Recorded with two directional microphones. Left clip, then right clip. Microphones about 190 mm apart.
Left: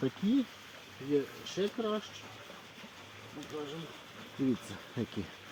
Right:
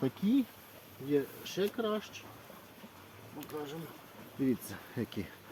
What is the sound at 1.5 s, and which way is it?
Speech, 5° right (ahead or behind).